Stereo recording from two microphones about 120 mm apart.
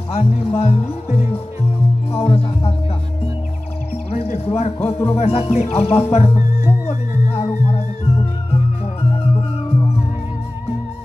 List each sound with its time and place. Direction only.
0.1 s speech: 65° left (ahead or behind)
2.1 s music: 60° left (ahead or behind)
4.1 s a sound: 65° left (ahead or behind)
4.8 s speech: 60° left (ahead or behind)
6.9 s music: 70° left (ahead or behind)